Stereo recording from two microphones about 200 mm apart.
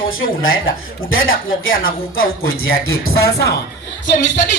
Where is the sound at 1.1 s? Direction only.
45° left (ahead or behind).